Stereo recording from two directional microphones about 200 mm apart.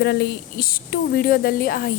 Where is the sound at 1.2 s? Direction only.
50° left (ahead or behind).